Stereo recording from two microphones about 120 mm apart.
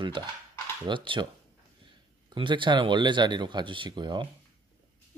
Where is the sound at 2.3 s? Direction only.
40° right (ahead or behind).